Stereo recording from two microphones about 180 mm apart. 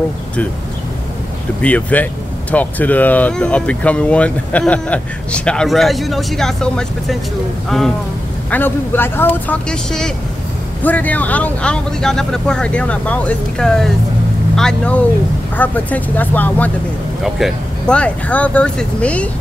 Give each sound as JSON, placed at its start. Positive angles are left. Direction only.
{"t": 1.6, "sound": "speech", "side_deg": 10}